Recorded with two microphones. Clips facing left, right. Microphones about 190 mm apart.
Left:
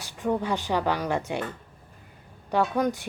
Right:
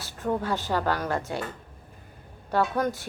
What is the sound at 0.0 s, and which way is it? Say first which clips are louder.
A woman's voice: left 1 dB; 15° left (ahead or behind).